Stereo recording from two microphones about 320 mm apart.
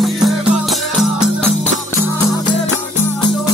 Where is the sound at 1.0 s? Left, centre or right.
Centre.